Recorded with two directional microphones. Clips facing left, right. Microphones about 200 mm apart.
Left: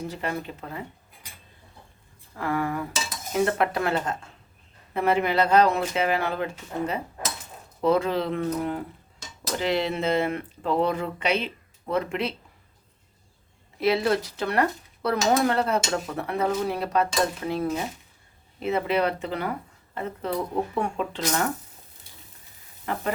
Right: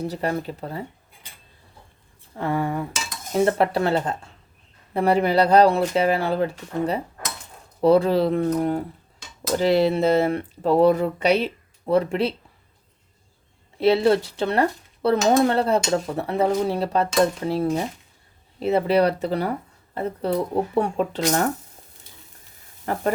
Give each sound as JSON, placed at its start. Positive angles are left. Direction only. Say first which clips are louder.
{"t": 0.0, "sound": "speech", "louder": "right 5 dB", "side_deg": -40}
{"t": 2.3, "sound": "speech", "louder": "right 3 dB", "side_deg": -25}
{"t": 13.7, "sound": "speech", "louder": "right 5 dB", "side_deg": -30}
{"t": 18.6, "sound": "speech", "louder": "right 5 dB", "side_deg": -35}
{"t": 22.9, "sound": "speech", "louder": "right 4 dB", "side_deg": -40}